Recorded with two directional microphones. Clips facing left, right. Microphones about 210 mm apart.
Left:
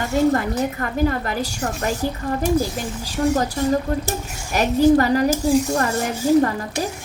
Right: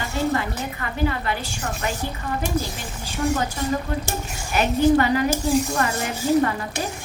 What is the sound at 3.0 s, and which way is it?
Speech, 40° left (ahead or behind).